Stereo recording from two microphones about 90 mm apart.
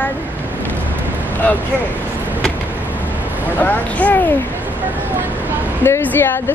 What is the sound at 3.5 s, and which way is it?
Speech, 20° left (ahead or behind).